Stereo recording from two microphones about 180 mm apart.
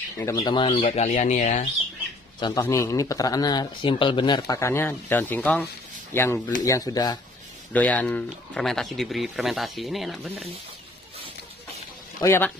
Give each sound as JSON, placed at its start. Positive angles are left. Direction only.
{"t": 0.2, "sound": "speech", "side_deg": 20}
{"t": 0.7, "sound": "speech", "side_deg": 40}
{"t": 2.4, "sound": "speech", "side_deg": 15}
{"t": 7.7, "sound": "speech", "side_deg": 10}
{"t": 12.2, "sound": "speech", "side_deg": 15}